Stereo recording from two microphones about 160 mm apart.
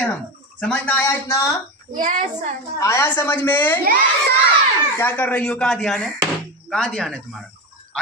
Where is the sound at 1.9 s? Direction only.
55° right (ahead or behind).